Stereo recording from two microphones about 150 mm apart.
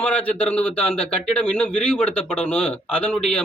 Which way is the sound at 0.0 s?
10° left (ahead or behind).